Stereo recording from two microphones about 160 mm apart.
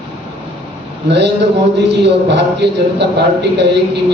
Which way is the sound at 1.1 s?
90° right.